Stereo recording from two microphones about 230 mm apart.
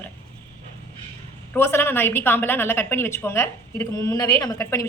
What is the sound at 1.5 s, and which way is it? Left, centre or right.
A woman's voice, centre.